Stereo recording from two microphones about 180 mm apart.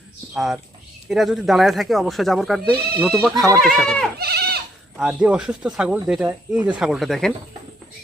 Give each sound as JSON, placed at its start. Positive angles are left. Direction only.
{"t": 0.3, "sound": "speech", "side_deg": 0}
{"t": 4.2, "sound": "goat", "side_deg": -60}
{"t": 4.9, "sound": "speech", "side_deg": -5}